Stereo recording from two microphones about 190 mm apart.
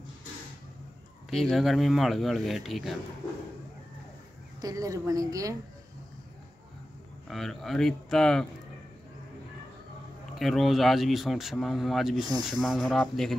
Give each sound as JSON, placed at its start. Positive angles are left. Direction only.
{"t": 1.3, "sound": "speech", "side_deg": 0}
{"t": 4.6, "sound": "a woman's voice", "side_deg": -20}
{"t": 7.2, "sound": "speech", "side_deg": 0}
{"t": 10.4, "sound": "speech", "side_deg": 0}